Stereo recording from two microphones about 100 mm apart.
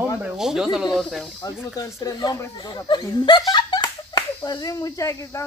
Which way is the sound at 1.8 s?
35° left (ahead or behind).